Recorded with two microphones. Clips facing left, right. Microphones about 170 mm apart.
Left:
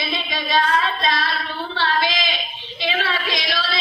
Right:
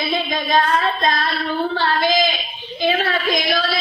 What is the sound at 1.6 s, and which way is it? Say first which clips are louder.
A woman's voice: right 3 dB; 45° right (ahead or behind).